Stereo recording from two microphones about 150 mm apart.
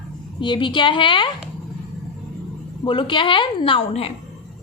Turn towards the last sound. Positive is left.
turn(degrees=40)  # may be behind; listen again after turning